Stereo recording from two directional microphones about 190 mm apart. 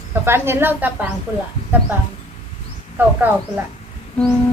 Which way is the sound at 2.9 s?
10° right (ahead or behind).